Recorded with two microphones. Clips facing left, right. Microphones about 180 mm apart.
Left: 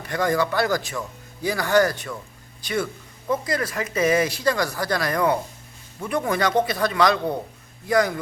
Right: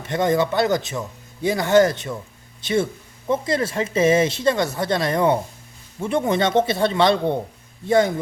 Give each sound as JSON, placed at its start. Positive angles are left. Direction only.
{"t": 0.0, "sound": "speech", "side_deg": -25}